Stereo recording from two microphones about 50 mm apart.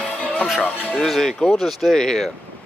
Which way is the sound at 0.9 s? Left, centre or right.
Centre.